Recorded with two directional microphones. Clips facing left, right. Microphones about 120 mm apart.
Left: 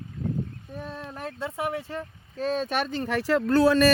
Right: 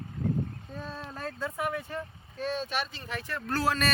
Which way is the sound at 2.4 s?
40° left (ahead or behind).